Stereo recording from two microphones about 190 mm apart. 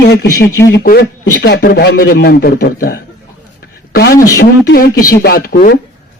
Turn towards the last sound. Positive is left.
turn(degrees=50)  # may be behind; listen again after turning